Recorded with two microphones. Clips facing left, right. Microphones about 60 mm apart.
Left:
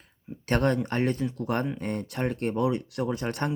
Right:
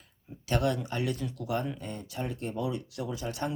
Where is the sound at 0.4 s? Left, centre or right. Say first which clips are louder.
Left 4 dB; left.